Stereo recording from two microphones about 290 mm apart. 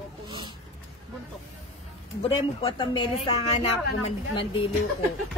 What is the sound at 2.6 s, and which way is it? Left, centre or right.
Speech, centre.